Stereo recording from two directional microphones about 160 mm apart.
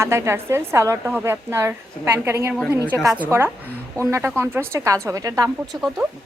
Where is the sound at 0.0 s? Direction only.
15° right (ahead or behind).